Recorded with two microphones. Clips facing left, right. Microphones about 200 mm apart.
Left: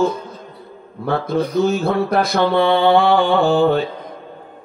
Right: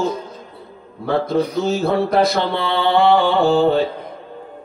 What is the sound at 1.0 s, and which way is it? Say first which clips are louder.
Speech: right 1 dB; 55° left (ahead or behind).